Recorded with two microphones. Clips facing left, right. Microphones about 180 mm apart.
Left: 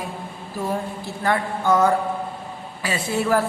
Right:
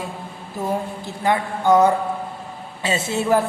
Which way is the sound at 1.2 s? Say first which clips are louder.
Right 3 dB; 20° right (ahead or behind).